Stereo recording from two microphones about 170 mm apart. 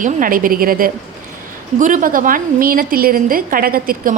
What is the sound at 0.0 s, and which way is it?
A woman's voice, 55° right (ahead or behind).